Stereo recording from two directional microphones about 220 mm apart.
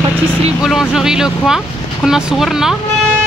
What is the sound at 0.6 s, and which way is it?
Speech, centre (ahead or behind).